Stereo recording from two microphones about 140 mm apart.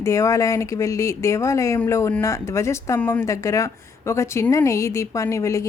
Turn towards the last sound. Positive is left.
turn(degrees=20)  # may be behind; listen again after turning